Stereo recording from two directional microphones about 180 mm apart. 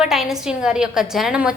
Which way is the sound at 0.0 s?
Centre (ahead or behind).